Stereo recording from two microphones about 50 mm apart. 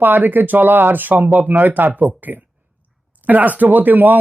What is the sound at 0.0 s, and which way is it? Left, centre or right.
Speech, right.